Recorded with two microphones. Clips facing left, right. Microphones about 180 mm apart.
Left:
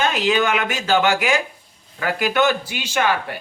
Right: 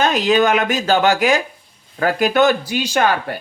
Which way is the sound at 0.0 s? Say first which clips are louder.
Right 4 dB; 40° right (ahead or behind).